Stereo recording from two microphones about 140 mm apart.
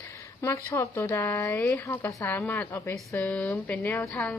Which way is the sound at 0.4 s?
20° left (ahead or behind).